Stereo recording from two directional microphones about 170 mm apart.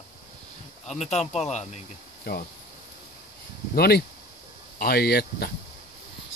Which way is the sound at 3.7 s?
65° left (ahead or behind).